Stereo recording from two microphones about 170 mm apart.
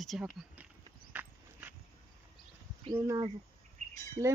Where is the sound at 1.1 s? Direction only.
10° right (ahead or behind).